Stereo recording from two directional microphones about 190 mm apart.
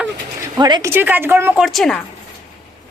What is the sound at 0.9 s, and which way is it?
Speech, 10° right (ahead or behind).